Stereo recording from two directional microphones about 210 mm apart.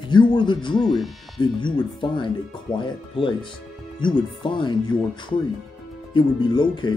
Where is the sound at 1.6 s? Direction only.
25° left (ahead or behind).